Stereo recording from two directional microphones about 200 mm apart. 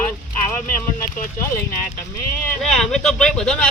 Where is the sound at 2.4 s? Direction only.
Centre (ahead or behind).